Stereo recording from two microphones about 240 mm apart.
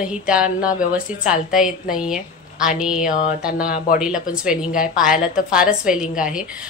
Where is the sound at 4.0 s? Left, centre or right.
Centre.